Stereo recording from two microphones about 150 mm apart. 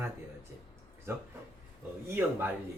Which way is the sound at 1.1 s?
15° right (ahead or behind).